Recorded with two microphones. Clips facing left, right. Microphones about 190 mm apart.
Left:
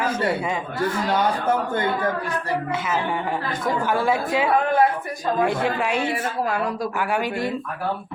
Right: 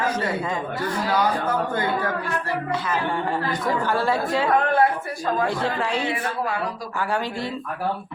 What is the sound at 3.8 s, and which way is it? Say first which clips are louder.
Speech: left 3 dB; 15° left (ahead or behind).